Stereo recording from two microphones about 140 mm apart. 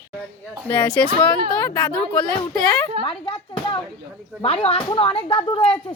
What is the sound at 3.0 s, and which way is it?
A woman's voice, 40° left (ahead or behind).